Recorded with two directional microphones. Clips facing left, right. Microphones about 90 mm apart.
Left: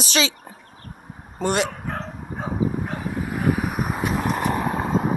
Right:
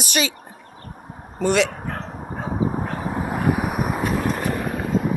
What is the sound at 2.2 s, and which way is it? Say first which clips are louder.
Vehicle: right 1 dB; 35° right (ahead or behind).